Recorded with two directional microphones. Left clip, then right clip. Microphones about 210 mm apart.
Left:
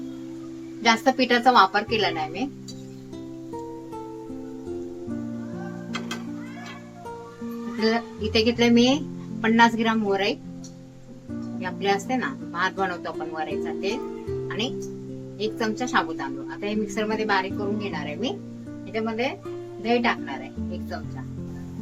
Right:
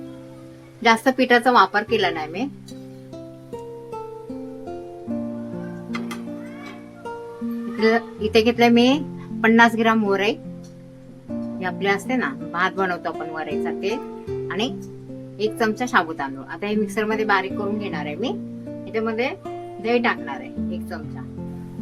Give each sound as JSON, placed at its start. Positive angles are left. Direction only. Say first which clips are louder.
{"t": 0.8, "sound": "a woman's voice", "louder": "right 3 dB", "side_deg": -15}
{"t": 7.8, "sound": "a woman's voice", "louder": "right 5 dB", "side_deg": -15}
{"t": 11.6, "sound": "a woman's voice", "louder": "right 2 dB", "side_deg": -15}
{"t": 14.4, "sound": "music", "louder": "right 5 dB", "side_deg": -15}
{"t": 15.4, "sound": "a woman's voice", "louder": "right 5 dB", "side_deg": -15}